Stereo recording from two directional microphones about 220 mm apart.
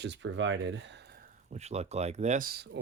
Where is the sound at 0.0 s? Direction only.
55° right (ahead or behind).